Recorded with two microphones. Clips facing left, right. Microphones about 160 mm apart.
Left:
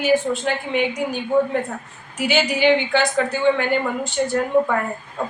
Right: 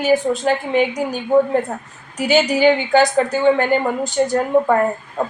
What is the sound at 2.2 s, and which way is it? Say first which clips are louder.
Speech: right 4 dB; 40° right (ahead or behind).